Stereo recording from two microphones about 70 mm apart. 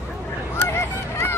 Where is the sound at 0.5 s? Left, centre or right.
Left.